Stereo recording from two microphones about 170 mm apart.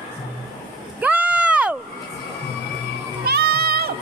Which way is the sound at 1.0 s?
10° right (ahead or behind).